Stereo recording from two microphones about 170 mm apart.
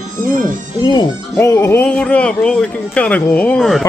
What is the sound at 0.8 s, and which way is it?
A man's voice, 25° left (ahead or behind).